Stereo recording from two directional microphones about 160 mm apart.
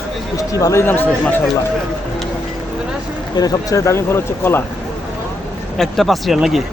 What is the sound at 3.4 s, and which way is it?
Speech, 20° left (ahead or behind).